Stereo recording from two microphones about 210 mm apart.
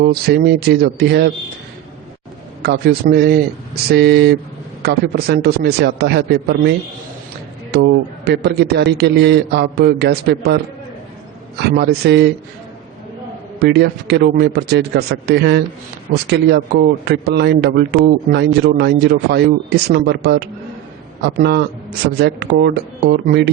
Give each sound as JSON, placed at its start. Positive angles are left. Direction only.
{"t": 0.0, "sound": "a man's voice", "side_deg": -45}
{"t": 2.6, "sound": "a man's voice", "side_deg": -50}
{"t": 11.8, "sound": "a man's voice", "side_deg": -50}
{"t": 13.6, "sound": "a man's voice", "side_deg": -50}